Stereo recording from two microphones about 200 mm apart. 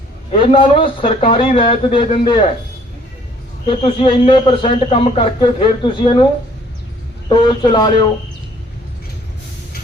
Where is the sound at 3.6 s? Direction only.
25° left (ahead or behind).